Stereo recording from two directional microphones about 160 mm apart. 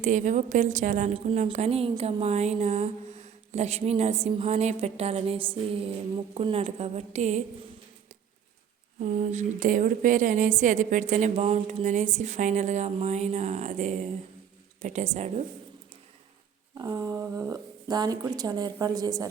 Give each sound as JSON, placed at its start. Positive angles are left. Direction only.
{"t": 0.0, "sound": "a woman's voice", "side_deg": -50}
{"t": 9.0, "sound": "a woman's voice", "side_deg": -50}
{"t": 16.7, "sound": "a woman's voice", "side_deg": -25}